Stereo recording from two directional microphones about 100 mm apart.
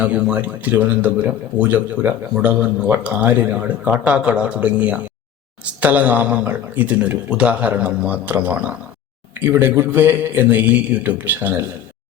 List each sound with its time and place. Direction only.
0.0 s a man's voice: 15° right (ahead or behind)